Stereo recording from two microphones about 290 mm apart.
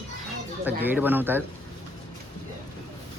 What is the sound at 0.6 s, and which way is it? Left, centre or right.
Speech, centre.